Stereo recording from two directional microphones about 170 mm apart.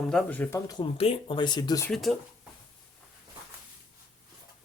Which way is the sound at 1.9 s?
Centre (ahead or behind).